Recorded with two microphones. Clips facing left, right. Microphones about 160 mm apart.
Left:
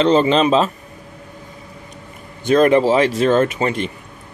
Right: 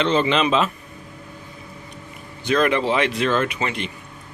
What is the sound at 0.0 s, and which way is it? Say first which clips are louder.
Speech: left 5 dB; 40° left (ahead or behind).